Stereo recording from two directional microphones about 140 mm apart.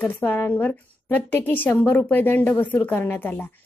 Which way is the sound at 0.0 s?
15° left (ahead or behind).